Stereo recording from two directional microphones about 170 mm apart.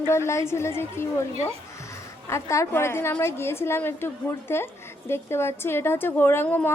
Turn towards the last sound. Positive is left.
turn(degrees=10)  # may be behind; listen again after turning